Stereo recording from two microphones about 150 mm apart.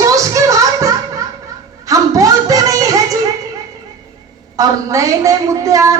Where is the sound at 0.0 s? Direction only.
20° right (ahead or behind).